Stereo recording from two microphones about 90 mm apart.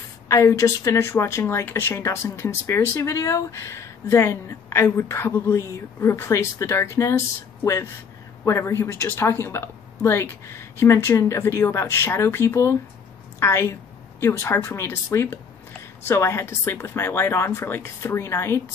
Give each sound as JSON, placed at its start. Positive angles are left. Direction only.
{"t": 0.3, "sound": "speech", "side_deg": 35}